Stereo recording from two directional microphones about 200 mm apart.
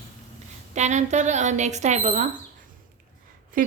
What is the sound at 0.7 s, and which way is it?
A woman's voice, 35° right (ahead or behind).